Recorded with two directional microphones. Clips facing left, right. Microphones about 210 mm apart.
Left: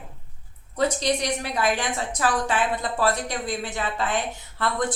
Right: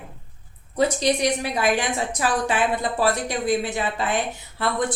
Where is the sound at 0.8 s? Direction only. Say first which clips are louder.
Right 3 dB; 10° right (ahead or behind).